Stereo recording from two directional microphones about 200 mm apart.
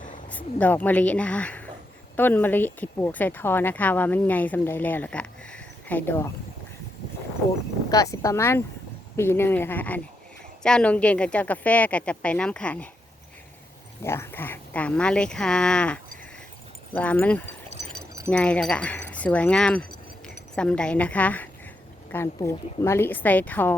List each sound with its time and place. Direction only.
0.3 s speech: 10° left (ahead or behind)
7.9 s speech: 15° left (ahead or behind)
14.0 s speech: 10° left (ahead or behind)